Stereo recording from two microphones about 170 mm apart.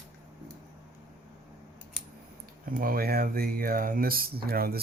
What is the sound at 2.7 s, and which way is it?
Speech, 60° right (ahead or behind).